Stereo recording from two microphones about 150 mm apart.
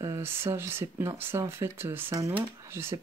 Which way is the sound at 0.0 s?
15° right (ahead or behind).